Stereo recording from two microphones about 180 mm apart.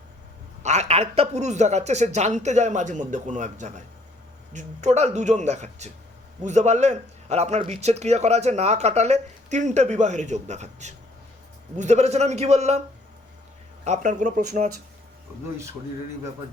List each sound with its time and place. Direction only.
0.6 s a man's voice: 40° right (ahead or behind)
13.8 s speech: 40° right (ahead or behind)